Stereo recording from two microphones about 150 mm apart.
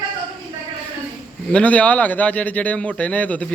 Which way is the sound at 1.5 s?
10° left (ahead or behind).